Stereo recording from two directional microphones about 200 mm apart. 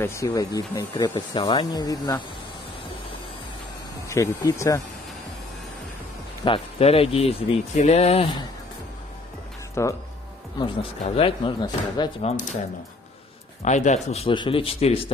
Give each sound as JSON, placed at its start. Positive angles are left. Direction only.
{"t": 0.0, "sound": "speech", "side_deg": 15}
{"t": 4.1, "sound": "speech", "side_deg": 15}
{"t": 6.4, "sound": "speech", "side_deg": 30}
{"t": 9.8, "sound": "speech", "side_deg": 15}
{"t": 10.6, "sound": "speech", "side_deg": 25}
{"t": 13.7, "sound": "speech", "side_deg": 35}